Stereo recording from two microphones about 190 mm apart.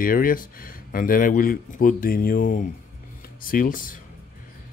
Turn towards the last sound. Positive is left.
turn(degrees=45)  # may be behind; listen again after turning